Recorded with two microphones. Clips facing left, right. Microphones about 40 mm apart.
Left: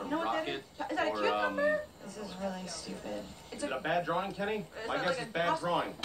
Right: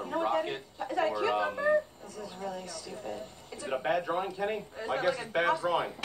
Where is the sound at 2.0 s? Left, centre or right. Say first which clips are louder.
Even; right.